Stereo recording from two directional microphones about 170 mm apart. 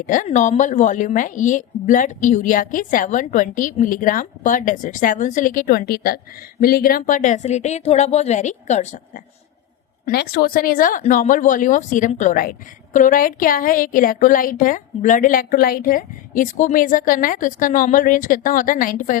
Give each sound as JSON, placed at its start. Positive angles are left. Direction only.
{"t": 0.0, "sound": "a woman's voice", "side_deg": 50}
{"t": 10.1, "sound": "a woman's voice", "side_deg": 70}